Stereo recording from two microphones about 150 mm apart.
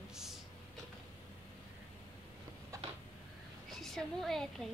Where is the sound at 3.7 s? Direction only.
Centre (ahead or behind).